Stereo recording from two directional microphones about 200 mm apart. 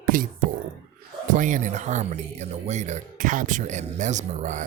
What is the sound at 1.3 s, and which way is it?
Speech, 40° right (ahead or behind).